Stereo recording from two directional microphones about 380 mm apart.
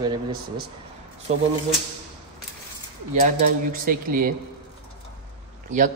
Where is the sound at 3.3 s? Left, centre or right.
Right.